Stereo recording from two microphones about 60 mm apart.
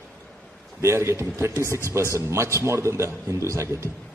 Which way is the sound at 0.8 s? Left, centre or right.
Right.